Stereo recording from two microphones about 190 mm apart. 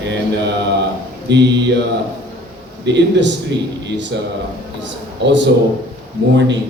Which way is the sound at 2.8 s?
65° right (ahead or behind).